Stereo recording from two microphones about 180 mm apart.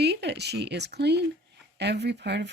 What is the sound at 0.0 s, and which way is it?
Speech, 70° right (ahead or behind).